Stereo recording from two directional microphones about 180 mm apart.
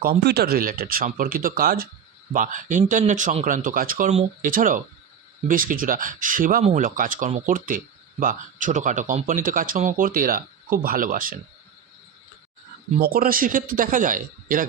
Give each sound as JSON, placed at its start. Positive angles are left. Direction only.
{"t": 0.0, "sound": "speech", "side_deg": -60}
{"t": 4.1, "sound": "speech", "side_deg": -35}
{"t": 4.5, "sound": "speech", "side_deg": -50}
{"t": 6.6, "sound": "speech", "side_deg": -35}
{"t": 6.8, "sound": "speech", "side_deg": -50}
{"t": 13.0, "sound": "speech", "side_deg": -55}